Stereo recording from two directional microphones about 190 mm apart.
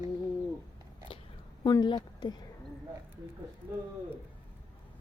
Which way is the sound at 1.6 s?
25° left (ahead or behind).